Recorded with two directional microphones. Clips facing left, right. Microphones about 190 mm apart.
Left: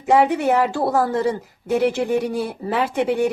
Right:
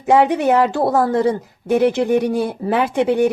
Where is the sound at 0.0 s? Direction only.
20° right (ahead or behind).